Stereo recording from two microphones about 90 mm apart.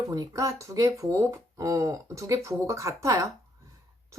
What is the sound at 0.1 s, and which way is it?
Speech, 35° right (ahead or behind).